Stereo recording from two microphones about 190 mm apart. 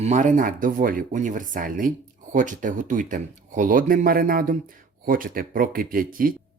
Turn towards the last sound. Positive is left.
turn(degrees=-50)  # may be behind; listen again after turning